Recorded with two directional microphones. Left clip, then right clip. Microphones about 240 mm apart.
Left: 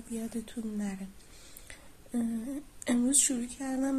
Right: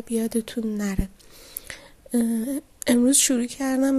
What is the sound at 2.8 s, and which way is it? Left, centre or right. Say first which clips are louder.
A woman's voice: right 9 dB; right.